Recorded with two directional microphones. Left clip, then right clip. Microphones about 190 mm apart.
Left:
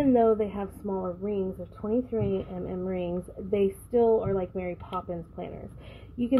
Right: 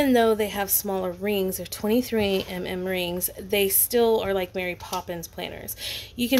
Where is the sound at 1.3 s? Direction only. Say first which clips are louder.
Right 5 dB; 65° right (ahead or behind).